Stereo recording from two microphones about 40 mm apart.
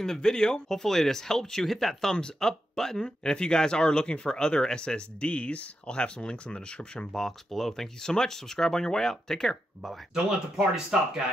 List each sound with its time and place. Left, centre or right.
0.0 s speech: centre
7.1 s speech: centre
9.8 s speech: centre